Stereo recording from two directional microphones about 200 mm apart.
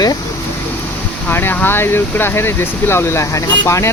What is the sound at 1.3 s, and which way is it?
Speech, 10° left (ahead or behind).